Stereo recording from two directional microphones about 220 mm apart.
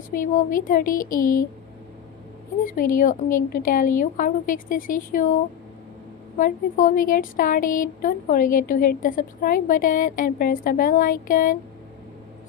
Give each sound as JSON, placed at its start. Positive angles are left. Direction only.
{"t": 0.1, "sound": "speech", "side_deg": 40}
{"t": 2.6, "sound": "speech", "side_deg": 40}
{"t": 6.3, "sound": "speech", "side_deg": 35}